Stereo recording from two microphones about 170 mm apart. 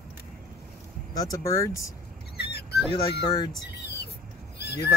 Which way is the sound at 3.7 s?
75° left (ahead or behind).